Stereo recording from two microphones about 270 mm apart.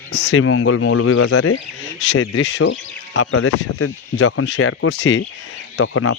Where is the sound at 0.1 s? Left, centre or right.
Left.